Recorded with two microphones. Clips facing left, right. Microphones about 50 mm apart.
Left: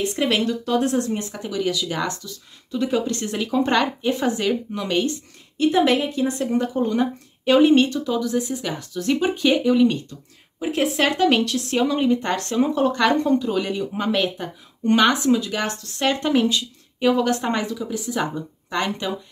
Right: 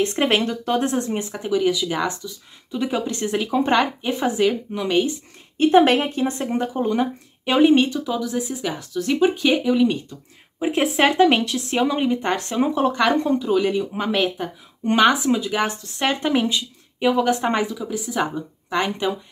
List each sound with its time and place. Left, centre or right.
0.0 s speech: right; by 5.1 s centre
5.6 s speech: right; by 9.9 s centre
10.6 s speech: right